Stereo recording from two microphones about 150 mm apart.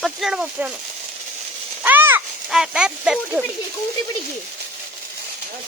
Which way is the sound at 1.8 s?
10° right (ahead or behind).